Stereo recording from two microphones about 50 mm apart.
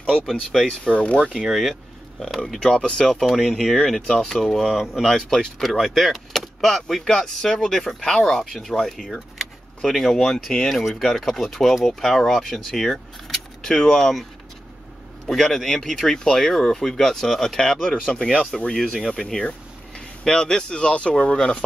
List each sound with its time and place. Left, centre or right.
0.3 s speech: centre
0.8 s speech: left
1.3 s speech: centre
3.1 s speech: centre
13.3 s a sound: centre
15.2 s speech: centre